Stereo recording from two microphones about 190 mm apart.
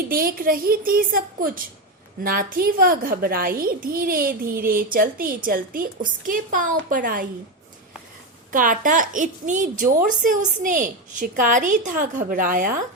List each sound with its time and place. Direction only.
0.1 s a woman's voice: 50° right (ahead or behind)
8.5 s a woman's voice: 45° right (ahead or behind)